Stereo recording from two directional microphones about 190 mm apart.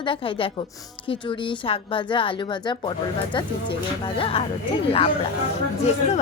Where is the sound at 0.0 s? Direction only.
25° left (ahead or behind).